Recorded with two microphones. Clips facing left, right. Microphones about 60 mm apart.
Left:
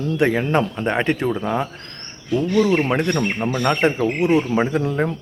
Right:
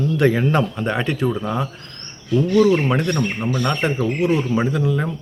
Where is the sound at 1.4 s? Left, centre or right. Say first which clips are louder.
Left 1 dB; left.